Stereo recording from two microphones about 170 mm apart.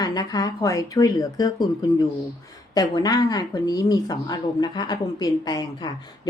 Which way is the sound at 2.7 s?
25° left (ahead or behind).